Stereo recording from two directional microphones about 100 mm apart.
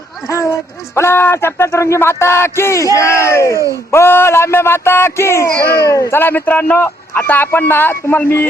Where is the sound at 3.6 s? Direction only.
35° right (ahead or behind).